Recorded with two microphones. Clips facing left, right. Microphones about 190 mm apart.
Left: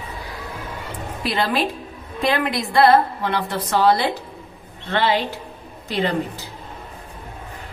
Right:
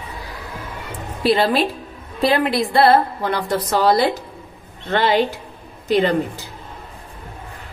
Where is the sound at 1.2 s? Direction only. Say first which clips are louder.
Right 5 dB; 35° right (ahead or behind).